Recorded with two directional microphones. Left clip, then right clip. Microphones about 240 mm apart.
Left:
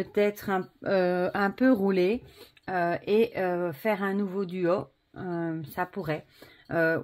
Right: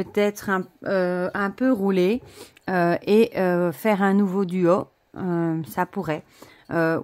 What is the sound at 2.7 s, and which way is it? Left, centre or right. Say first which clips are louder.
A woman's voice: right 6 dB; right.